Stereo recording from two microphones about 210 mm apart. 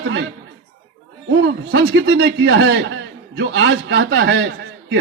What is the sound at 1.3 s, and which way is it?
A man's voice, 55° right (ahead or behind).